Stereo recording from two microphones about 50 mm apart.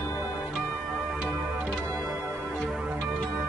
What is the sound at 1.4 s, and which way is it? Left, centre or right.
Music, right.